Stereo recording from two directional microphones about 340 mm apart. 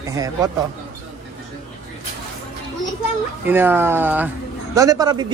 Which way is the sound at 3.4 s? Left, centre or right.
Centre.